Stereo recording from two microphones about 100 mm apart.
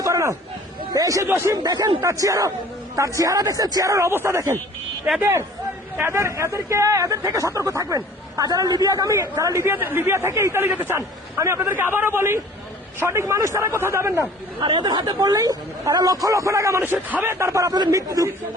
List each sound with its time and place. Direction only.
0.0 s a sound: 30° right (ahead or behind)
1.3 s speech: 30° right (ahead or behind)
1.5 s speech: 40° right (ahead or behind)
14.6 s speech: 55° right (ahead or behind); by 18.3 s 35° right (ahead or behind)